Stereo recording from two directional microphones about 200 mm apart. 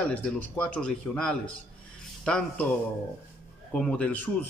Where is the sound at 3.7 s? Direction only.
5° left (ahead or behind).